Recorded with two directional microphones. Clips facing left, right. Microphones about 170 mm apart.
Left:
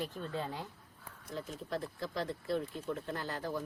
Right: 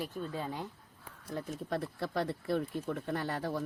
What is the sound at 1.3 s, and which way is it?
Speech, 60° right (ahead or behind).